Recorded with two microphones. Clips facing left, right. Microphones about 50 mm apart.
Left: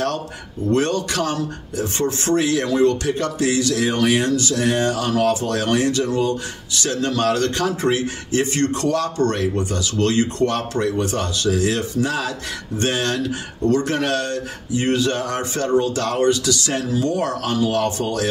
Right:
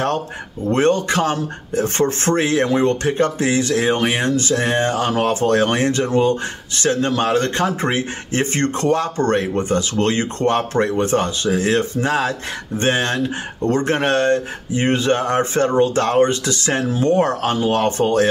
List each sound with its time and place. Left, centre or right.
0.7 s speech: right
2.0 s speech: right